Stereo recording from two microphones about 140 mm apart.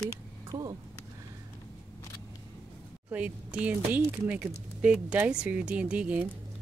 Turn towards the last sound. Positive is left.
turn(degrees=-10)  # may be behind; listen again after turning